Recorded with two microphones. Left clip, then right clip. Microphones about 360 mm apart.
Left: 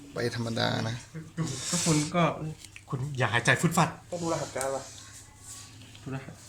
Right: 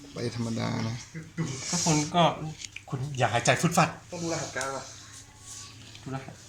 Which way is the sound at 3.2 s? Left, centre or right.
Centre.